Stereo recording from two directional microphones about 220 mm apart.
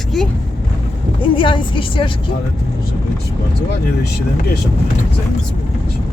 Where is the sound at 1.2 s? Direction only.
25° left (ahead or behind).